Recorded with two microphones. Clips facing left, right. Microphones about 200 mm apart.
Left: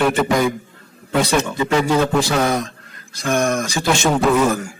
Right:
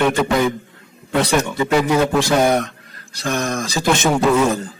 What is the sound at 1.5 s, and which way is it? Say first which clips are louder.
Speech: right 1 dB; 15° right (ahead or behind).